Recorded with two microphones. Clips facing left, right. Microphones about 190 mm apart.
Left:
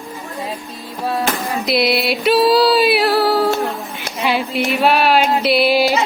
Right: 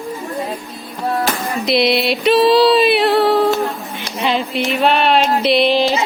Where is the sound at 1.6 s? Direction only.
Centre (ahead or behind).